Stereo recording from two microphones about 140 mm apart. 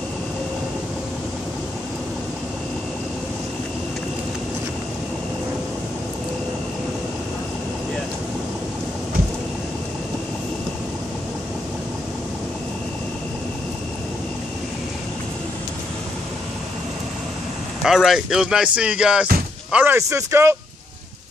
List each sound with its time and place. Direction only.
17.8 s speech: centre (ahead or behind); by 20.5 s 20° right (ahead or behind)